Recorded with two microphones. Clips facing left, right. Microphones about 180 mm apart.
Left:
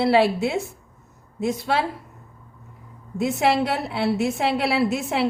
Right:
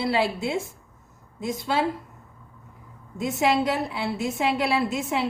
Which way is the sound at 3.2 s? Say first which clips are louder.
Left 2 dB; 70° left (ahead or behind).